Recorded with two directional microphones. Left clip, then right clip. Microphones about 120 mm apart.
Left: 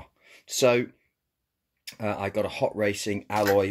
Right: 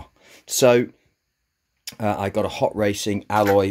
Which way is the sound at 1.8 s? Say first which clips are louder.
Right 6 dB; 35° right (ahead or behind).